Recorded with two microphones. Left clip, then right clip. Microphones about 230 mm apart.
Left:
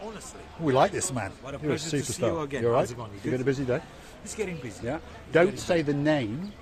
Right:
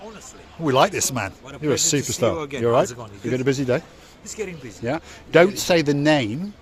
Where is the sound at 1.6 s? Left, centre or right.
Right.